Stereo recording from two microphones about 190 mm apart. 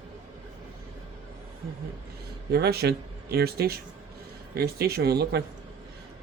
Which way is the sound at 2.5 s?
60° right (ahead or behind).